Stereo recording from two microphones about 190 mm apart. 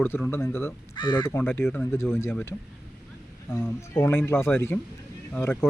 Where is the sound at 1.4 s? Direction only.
10° left (ahead or behind).